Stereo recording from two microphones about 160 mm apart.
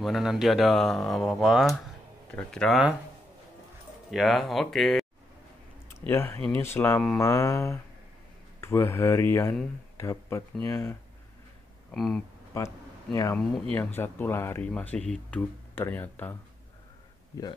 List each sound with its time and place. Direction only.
0.0 s speech: centre (ahead or behind)
4.1 s speech: centre (ahead or behind)
5.9 s speech: 15° left (ahead or behind)
11.9 s speech: 5° left (ahead or behind)
12.5 s speech: 20° left (ahead or behind)